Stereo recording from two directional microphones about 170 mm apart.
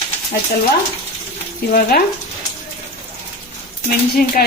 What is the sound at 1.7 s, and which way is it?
Speech, 60° left (ahead or behind).